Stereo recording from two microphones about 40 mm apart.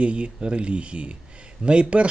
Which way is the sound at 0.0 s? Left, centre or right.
Right.